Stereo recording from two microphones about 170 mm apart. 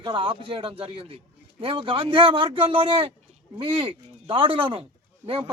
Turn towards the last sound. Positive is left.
turn(degrees=-30)  # may be behind; listen again after turning